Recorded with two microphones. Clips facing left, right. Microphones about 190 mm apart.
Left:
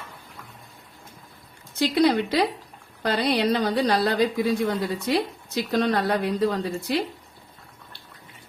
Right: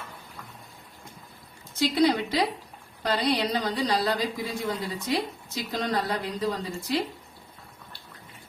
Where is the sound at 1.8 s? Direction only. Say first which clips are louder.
Left 3 dB; 65° left (ahead or behind).